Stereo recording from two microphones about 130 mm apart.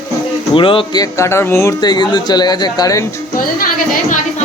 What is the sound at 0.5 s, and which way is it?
Speech, 40° left (ahead or behind).